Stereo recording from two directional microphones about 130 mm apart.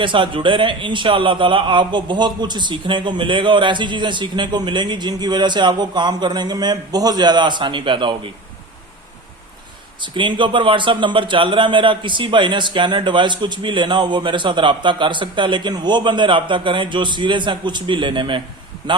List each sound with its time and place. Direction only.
0.0 s a man's voice: 40° right (ahead or behind)
10.0 s a man's voice: 40° right (ahead or behind)